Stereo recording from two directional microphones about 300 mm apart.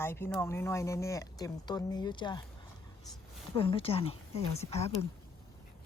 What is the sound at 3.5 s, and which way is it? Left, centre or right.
Speech, centre.